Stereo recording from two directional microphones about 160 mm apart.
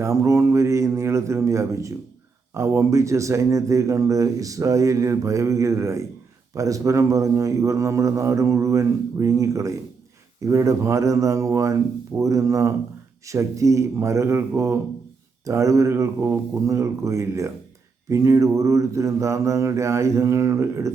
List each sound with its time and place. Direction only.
0.0 s a man's voice: 20° right (ahead or behind)